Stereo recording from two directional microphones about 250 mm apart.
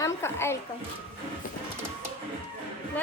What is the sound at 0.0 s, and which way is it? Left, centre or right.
Speech, centre.